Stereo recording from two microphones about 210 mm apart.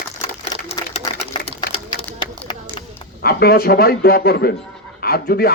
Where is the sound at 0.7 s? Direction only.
30° left (ahead or behind).